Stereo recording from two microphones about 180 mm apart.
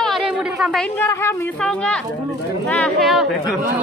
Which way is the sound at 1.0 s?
10° left (ahead or behind).